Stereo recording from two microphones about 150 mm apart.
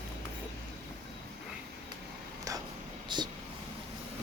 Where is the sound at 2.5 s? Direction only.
20° right (ahead or behind).